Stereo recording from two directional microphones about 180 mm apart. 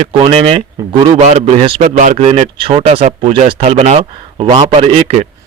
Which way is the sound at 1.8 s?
45° right (ahead or behind).